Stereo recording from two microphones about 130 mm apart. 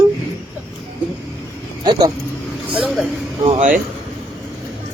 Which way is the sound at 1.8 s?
35° right (ahead or behind).